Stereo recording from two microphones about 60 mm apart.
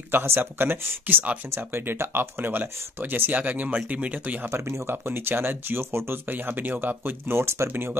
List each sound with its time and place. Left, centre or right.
0.1 s speech: right
1.5 s speech: right
4.5 s speech: right
6.3 s speech: right
7.7 s speech: right